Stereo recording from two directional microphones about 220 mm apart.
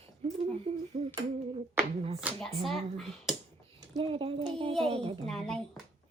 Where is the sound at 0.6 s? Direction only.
30° right (ahead or behind).